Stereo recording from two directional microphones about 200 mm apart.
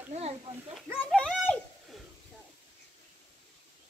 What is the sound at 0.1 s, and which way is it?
Speech, 30° right (ahead or behind).